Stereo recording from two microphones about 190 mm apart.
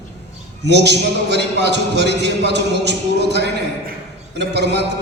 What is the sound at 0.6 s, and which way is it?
A man's voice, 65° right (ahead or behind).